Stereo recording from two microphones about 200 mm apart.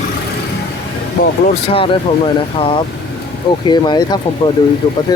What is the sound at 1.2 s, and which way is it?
Speech, 45° left (ahead or behind).